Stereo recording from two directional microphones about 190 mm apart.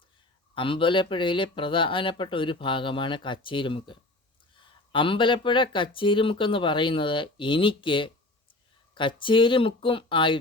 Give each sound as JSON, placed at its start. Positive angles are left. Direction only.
{"t": 0.5, "sound": "speech", "side_deg": 25}